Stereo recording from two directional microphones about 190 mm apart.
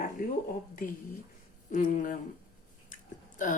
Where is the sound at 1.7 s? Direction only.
45° left (ahead or behind).